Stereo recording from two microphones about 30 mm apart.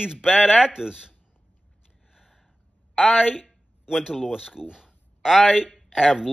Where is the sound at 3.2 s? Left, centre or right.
Centre.